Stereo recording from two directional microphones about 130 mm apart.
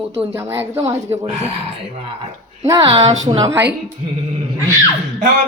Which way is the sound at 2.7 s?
35° right (ahead or behind).